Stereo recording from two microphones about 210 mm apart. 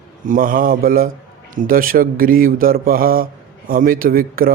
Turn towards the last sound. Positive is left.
turn(degrees=-45)  # may be behind; listen again after turning